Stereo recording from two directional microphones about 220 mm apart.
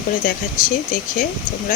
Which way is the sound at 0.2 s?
40° left (ahead or behind).